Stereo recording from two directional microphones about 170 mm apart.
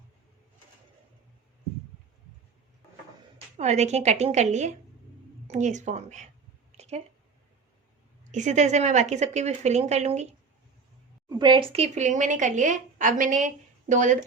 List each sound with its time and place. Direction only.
3.3 s a woman's voice: 40° right (ahead or behind)
6.7 s a sound: 40° right (ahead or behind)
8.3 s a woman's voice: 45° right (ahead or behind)
11.3 s a woman's voice: 25° right (ahead or behind); by 14.3 s 45° right (ahead or behind)